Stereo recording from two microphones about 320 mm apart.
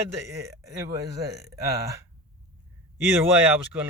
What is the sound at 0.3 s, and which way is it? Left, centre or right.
Speech, centre.